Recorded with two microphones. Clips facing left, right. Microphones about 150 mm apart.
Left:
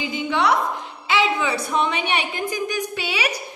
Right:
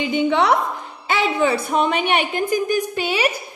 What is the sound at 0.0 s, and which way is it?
Speech, 65° right (ahead or behind).